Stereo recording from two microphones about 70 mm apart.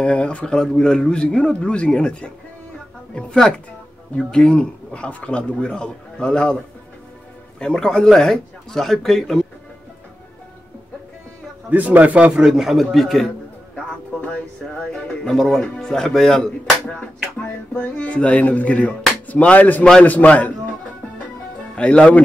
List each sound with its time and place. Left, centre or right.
0.0 s speech: centre
11.7 s a man's voice: right
12.4 s a man's voice: centre
13.7 s a sound: centre
14.8 s speech: centre
17.4 s music: centre
20.1 s a man's voice: left
21.7 s speech: centre